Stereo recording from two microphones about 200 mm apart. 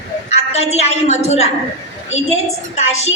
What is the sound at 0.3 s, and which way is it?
A woman's voice, 30° left (ahead or behind).